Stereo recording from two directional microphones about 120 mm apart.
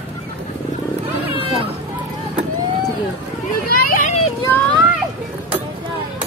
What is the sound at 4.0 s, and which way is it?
Children playing, 90° left.